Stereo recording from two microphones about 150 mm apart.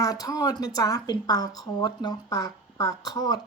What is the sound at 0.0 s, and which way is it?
Speech, 25° left (ahead or behind).